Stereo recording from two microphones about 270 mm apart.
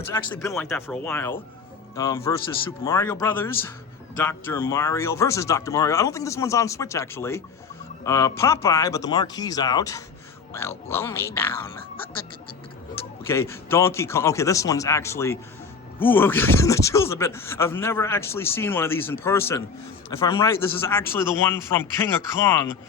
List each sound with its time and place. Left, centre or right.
0.1 s a man's voice: centre
13.2 s a man's voice: centre